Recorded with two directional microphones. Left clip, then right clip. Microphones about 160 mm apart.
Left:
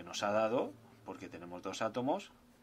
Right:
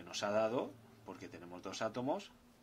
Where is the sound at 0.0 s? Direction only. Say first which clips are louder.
Left 2 dB; 30° left (ahead or behind).